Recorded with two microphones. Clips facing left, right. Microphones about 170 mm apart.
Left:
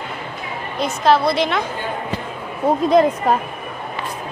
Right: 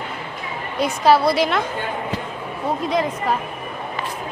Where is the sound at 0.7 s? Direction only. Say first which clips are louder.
Even; 10° right (ahead or behind).